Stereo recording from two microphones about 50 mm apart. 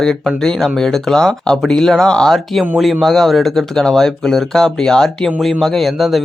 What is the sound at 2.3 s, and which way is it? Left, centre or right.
Speech, centre.